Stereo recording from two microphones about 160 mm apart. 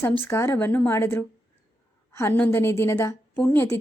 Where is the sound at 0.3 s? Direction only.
15° left (ahead or behind).